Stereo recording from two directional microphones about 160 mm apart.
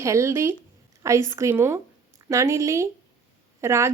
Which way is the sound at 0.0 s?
20° right (ahead or behind).